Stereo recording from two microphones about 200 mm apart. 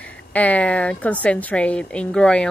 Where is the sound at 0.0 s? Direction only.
5° left (ahead or behind).